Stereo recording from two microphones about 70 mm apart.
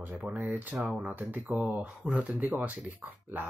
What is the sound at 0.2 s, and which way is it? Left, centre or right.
Speech, right.